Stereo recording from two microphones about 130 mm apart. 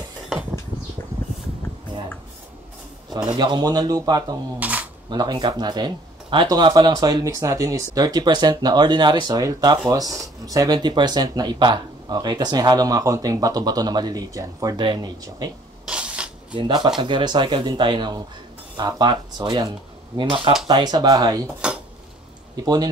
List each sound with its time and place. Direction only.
3.3 s speech: 35° right (ahead or behind)
4.6 s speech: 10° right (ahead or behind)
5.1 s speech: 30° right (ahead or behind)
15.9 s a sound: 10° right (ahead or behind)
16.5 s speech: 35° right (ahead or behind)
22.6 s speech: 30° right (ahead or behind)